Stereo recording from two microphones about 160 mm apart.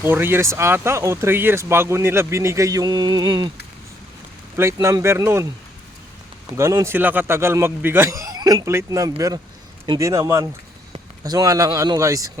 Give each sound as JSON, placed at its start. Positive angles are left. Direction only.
{"t": 0.0, "sound": "speech", "side_deg": -15}
{"t": 4.5, "sound": "speech", "side_deg": -15}
{"t": 6.6, "sound": "speech", "side_deg": -15}